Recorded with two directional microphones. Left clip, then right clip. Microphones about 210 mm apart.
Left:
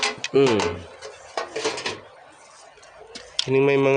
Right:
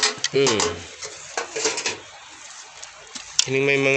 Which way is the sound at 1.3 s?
45° left (ahead or behind).